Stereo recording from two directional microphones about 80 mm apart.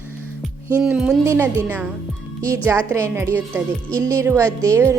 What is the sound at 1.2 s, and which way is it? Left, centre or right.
A woman's voice, right.